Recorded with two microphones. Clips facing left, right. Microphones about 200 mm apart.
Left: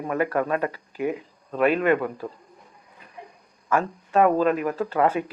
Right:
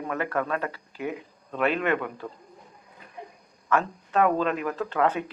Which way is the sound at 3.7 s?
10° left (ahead or behind).